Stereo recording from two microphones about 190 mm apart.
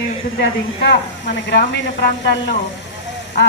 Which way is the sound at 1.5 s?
65° left (ahead or behind).